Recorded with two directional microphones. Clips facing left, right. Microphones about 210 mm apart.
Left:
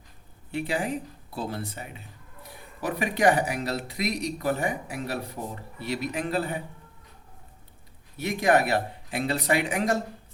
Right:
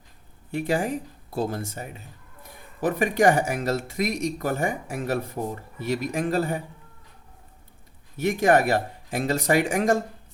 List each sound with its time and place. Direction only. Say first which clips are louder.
0.5 s speech: right 3 dB; 45° right (ahead or behind)
8.1 s speech: right 3 dB; 50° right (ahead or behind)